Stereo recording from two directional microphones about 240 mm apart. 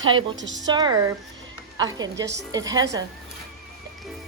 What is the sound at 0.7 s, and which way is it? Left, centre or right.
A woman's voice, centre.